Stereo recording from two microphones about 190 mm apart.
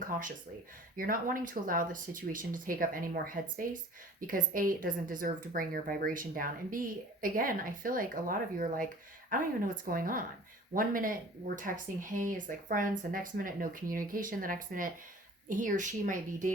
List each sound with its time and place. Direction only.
0.1 s a woman's voice: 45° right (ahead or behind)